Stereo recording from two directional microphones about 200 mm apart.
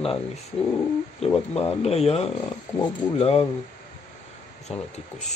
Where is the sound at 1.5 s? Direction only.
30° left (ahead or behind).